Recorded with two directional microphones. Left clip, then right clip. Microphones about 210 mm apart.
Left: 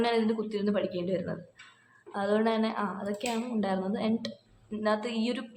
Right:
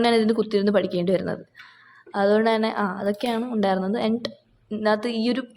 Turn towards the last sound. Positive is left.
turn(degrees=-30)  # may be behind; listen again after turning